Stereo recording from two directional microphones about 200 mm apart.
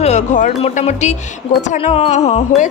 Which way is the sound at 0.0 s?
35° left (ahead or behind).